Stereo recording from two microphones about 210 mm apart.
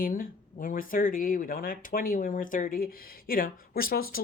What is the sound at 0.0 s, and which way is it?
Speech, 40° left (ahead or behind).